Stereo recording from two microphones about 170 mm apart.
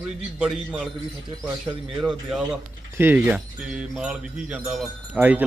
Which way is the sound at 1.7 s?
25° right (ahead or behind).